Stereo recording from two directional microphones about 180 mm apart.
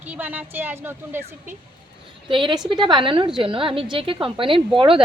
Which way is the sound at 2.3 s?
25° right (ahead or behind).